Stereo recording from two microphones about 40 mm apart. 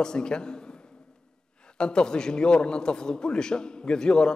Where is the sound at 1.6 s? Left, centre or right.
Left.